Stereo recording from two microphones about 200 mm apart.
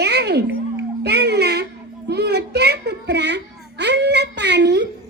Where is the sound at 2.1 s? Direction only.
55° right (ahead or behind).